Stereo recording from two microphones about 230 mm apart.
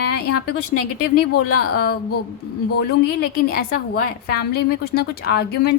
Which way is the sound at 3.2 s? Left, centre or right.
Left.